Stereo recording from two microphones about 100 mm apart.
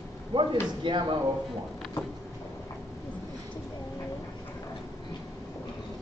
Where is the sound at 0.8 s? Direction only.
55° right (ahead or behind).